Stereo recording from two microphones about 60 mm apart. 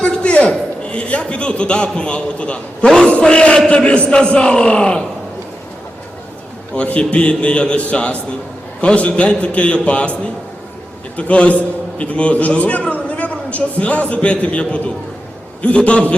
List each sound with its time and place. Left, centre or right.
0.0 s a man's voice: centre
6.7 s a man's voice: left
11.2 s a man's voice: left